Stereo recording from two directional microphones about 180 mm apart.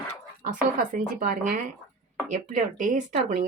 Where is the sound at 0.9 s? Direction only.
50° right (ahead or behind).